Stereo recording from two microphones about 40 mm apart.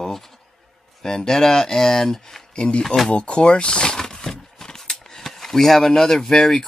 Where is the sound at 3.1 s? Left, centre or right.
Left.